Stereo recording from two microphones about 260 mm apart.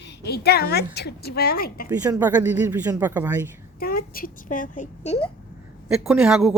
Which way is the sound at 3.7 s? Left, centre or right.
Left.